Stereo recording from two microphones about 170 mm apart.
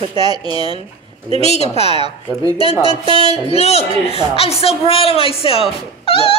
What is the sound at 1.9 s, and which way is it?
Speech, 25° right (ahead or behind).